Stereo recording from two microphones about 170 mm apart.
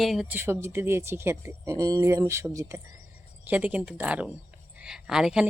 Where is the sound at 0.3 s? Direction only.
15° right (ahead or behind).